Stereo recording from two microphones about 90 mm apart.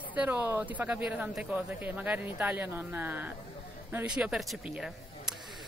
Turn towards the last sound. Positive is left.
turn(degrees=-5)  # may be behind; listen again after turning